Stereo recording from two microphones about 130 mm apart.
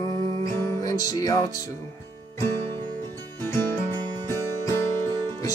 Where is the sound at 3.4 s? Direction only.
20° left (ahead or behind).